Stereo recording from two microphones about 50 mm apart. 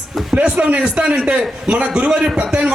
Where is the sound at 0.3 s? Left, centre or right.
Right.